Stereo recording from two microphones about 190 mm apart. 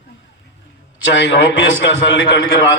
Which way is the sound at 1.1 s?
75° left (ahead or behind).